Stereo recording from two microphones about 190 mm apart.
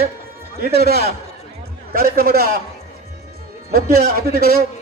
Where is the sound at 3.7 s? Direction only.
50° right (ahead or behind).